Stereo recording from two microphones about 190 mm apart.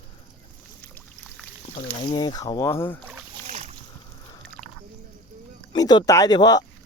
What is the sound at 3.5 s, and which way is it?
Boat, 35° right (ahead or behind).